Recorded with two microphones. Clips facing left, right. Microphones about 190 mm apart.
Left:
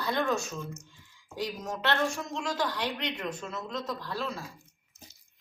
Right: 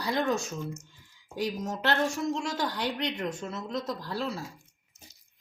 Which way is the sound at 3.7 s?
35° right (ahead or behind).